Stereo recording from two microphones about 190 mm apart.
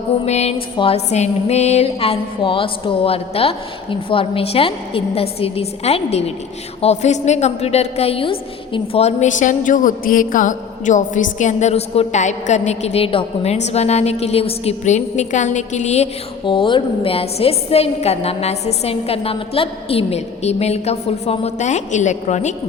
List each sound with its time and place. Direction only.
0.3 s a woman's voice: 35° left (ahead or behind)
16.5 s a woman's voice: 25° left (ahead or behind)